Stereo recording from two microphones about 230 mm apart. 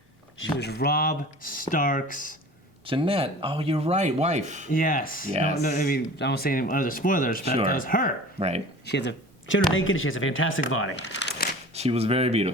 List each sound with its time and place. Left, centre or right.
0.3 s speech: left
2.8 s speech: right
4.7 s speech: left
8.4 s speech: right
8.9 s speech: left
11.7 s speech: right